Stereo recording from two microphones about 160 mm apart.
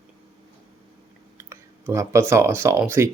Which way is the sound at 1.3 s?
15° right (ahead or behind).